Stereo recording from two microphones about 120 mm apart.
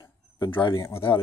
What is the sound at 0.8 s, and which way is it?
Speech, 20° left (ahead or behind).